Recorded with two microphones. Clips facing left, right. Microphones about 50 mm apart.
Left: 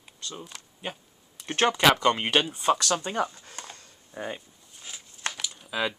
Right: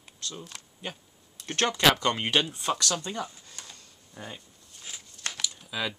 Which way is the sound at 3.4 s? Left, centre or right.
Left.